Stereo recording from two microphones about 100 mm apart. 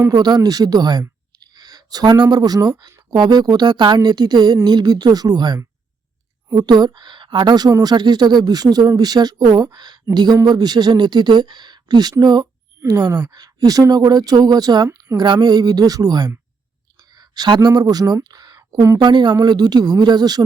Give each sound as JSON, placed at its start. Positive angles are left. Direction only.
{"t": 0.1, "sound": "a woman's voice", "side_deg": -45}
{"t": 19.0, "sound": "a woman's voice", "side_deg": -50}